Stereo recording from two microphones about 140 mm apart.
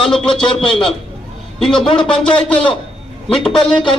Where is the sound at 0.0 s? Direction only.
5° left (ahead or behind).